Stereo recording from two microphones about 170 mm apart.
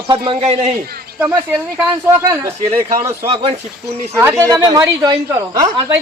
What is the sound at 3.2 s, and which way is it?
Speech, 35° right (ahead or behind).